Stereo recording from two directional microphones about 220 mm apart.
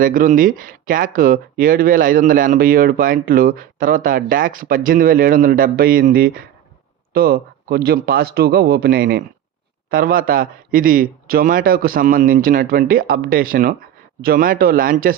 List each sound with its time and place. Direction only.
0.0 s a man's voice: 40° right (ahead or behind)